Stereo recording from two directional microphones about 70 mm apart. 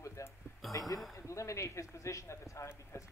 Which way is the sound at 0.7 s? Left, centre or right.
Left.